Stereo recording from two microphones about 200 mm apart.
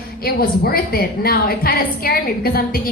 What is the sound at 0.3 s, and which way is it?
A woman's voice, 50° left (ahead or behind).